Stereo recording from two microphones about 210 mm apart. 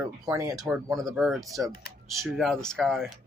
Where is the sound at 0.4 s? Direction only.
15° right (ahead or behind).